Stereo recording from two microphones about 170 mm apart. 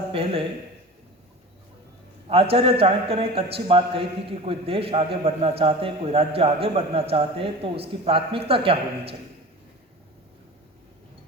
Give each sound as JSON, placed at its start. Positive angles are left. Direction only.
{"t": 0.1, "sound": "a man's voice", "side_deg": -35}
{"t": 2.2, "sound": "a man's voice", "side_deg": -35}